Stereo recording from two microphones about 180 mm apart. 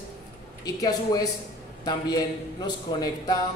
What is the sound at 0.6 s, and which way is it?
A woman's voice, 20° left (ahead or behind).